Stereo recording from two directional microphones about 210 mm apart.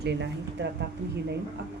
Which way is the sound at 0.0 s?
55° right (ahead or behind).